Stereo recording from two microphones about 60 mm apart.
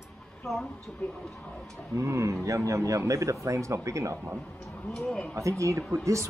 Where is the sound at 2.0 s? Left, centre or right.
Right.